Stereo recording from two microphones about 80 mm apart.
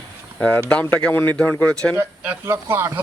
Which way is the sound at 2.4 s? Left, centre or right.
Right.